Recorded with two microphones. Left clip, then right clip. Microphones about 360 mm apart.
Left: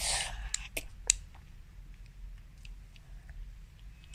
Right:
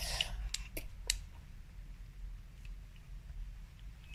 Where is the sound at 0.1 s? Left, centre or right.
Left.